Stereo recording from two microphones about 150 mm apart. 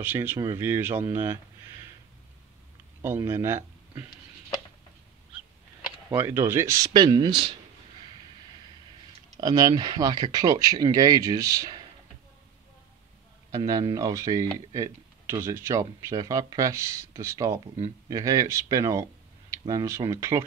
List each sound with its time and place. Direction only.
0.0 s speech: 10° right (ahead or behind)
3.0 s speech: 15° right (ahead or behind)
6.0 s speech: 15° right (ahead or behind)
6.9 s speech: 30° right (ahead or behind)
9.4 s speech: 25° right (ahead or behind)
13.5 s speech: 25° right (ahead or behind)